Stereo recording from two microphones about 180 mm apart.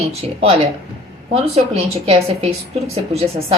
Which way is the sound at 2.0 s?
35° right (ahead or behind).